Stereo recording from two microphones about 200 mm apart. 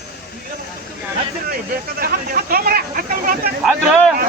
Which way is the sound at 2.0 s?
45° right (ahead or behind).